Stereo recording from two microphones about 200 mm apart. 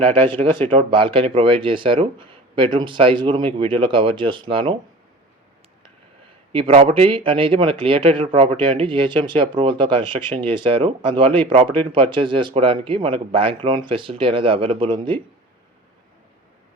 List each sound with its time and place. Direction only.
0.1 s speech: 25° right (ahead or behind)
6.5 s speech: 30° right (ahead or behind)